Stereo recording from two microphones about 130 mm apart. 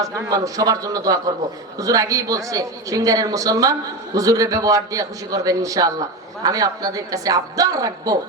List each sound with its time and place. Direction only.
0.0 s a man's voice: 30° right (ahead or behind)